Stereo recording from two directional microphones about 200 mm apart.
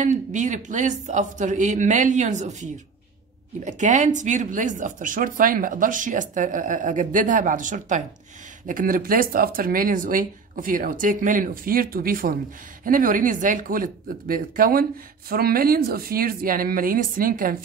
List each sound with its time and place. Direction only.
0.0 s speech: 40° right (ahead or behind)